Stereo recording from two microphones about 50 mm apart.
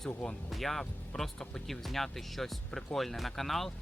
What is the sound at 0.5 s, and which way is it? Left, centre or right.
Speech, centre.